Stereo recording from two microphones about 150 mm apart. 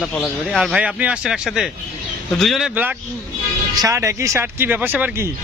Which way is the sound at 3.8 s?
20° right (ahead or behind).